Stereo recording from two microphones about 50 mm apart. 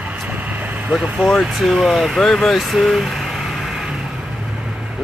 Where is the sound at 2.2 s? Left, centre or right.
Centre.